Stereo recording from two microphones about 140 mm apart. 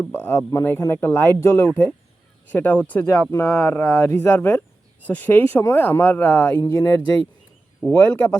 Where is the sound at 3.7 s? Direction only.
15° left (ahead or behind).